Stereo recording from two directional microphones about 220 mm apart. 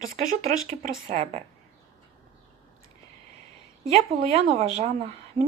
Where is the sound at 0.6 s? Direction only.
30° right (ahead or behind).